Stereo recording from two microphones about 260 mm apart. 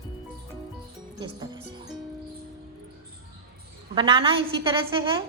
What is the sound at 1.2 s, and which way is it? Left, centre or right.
Speech, centre.